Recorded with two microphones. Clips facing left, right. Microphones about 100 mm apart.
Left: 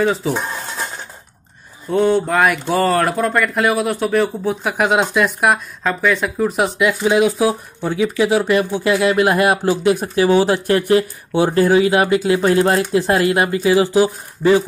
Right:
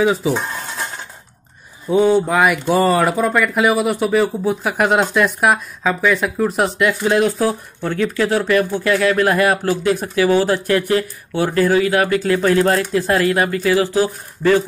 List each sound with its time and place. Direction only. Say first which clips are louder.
0.0 s speech: right 1 dB; 5° right (ahead or behind)
1.9 s speech: right 1 dB; 5° right (ahead or behind); by 14.6 s 15° left (ahead or behind)